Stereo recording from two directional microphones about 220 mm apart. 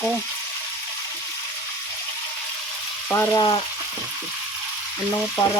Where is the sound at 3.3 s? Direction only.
20° left (ahead or behind).